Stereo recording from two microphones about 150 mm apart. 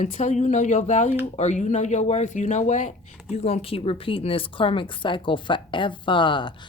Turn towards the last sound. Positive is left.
turn(degrees=30)  # may be behind; listen again after turning